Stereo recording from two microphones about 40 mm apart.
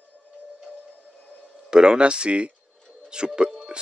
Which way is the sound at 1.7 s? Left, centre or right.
Right.